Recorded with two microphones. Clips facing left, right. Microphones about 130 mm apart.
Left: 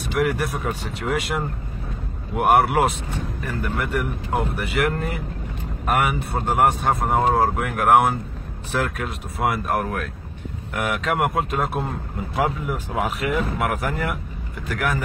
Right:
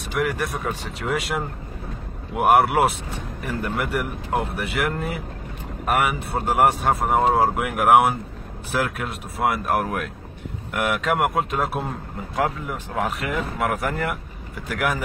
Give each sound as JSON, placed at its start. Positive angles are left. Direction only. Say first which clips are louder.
{"t": 0.1, "sound": "speech", "louder": "left 2 dB", "side_deg": 0}